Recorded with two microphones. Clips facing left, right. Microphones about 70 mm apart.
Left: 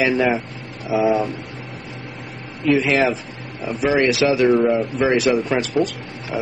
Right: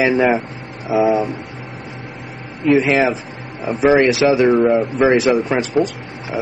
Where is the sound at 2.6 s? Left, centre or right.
Right.